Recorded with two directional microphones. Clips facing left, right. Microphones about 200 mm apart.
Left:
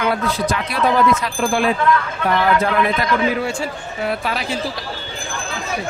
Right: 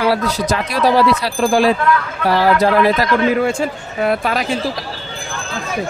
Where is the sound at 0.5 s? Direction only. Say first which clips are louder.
Right 5 dB; 35° right (ahead or behind).